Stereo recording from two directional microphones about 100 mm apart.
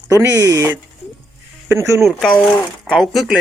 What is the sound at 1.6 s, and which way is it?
Speech, 30° right (ahead or behind).